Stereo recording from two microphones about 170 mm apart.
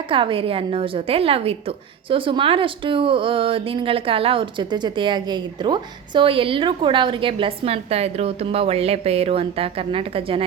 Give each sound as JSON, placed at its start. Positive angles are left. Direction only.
{"t": 0.1, "sound": "a woman's voice", "side_deg": -30}